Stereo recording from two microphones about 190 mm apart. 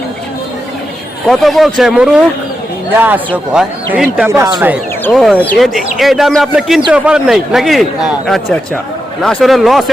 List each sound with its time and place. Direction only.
1.3 s speech: centre (ahead or behind)
4.3 s speech: 20° right (ahead or behind)
5.1 s speech: centre (ahead or behind)
9.2 s speech: centre (ahead or behind)